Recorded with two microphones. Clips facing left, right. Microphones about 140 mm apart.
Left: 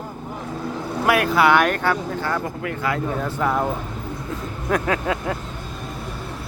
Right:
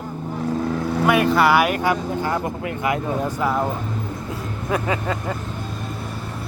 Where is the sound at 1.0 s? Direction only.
Centre (ahead or behind); by 3.4 s 15° right (ahead or behind).